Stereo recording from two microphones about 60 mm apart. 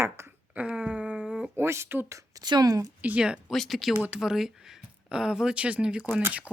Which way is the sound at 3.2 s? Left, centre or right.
Centre.